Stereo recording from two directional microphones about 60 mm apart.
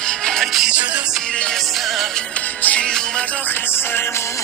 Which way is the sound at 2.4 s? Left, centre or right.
Left.